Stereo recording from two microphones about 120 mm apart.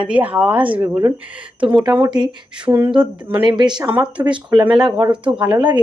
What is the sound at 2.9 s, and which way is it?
Speech, 5° right (ahead or behind).